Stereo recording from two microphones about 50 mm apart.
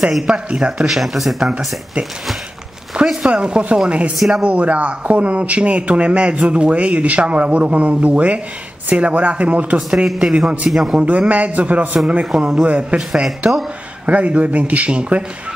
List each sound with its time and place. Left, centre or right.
0.3 s a man's voice: right
0.8 s speech: centre
2.9 s a sound: centre
3.3 s a man's voice: centre
10.7 s a man's voice: centre
11.0 s a man's voice: right
12.3 s a man's voice: centre